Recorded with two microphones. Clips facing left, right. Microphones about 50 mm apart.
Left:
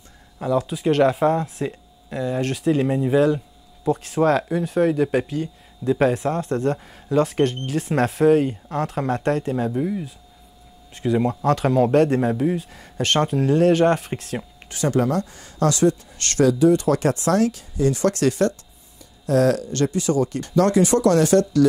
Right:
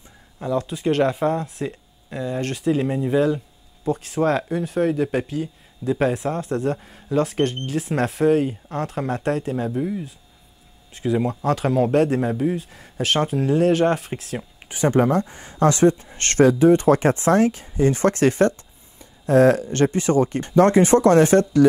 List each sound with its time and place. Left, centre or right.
0.4 s speech: centre
14.7 s speech: right